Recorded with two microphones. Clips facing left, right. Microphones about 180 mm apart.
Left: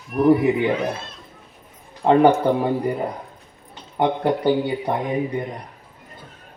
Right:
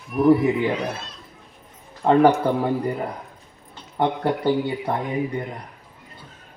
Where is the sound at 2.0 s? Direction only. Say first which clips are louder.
Left 1 dB; 15° left (ahead or behind).